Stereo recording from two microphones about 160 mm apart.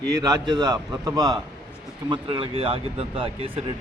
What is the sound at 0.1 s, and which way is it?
A man's voice, 25° right (ahead or behind).